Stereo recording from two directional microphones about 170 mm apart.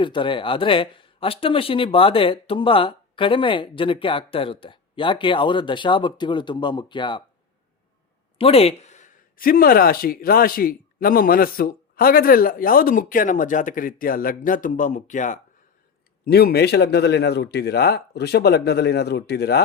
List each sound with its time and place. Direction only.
0.0 s speech: 30° left (ahead or behind)
8.4 s speech: 35° left (ahead or behind)
16.2 s a man's voice: 65° left (ahead or behind)